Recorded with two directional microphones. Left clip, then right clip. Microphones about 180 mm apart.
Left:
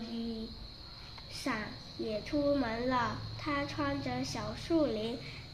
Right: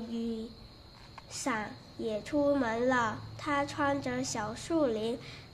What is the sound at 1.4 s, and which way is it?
A woman's voice, 35° right (ahead or behind).